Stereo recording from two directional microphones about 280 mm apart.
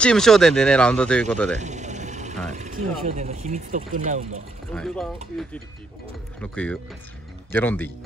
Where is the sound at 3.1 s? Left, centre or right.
Right.